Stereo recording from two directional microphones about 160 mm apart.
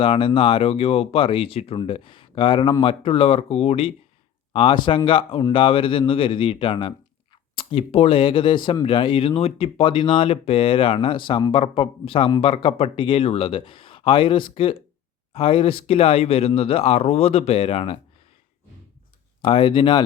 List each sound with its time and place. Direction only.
0.0 s speech: 35° left (ahead or behind)
19.4 s speech: 35° left (ahead or behind)